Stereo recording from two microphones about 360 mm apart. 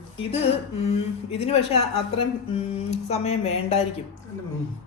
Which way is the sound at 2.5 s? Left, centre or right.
Centre.